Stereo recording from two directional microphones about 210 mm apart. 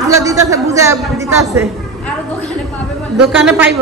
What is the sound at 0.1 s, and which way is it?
Speech, 15° right (ahead or behind).